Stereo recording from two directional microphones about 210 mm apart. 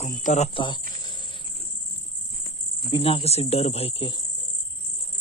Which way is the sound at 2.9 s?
25° left (ahead or behind).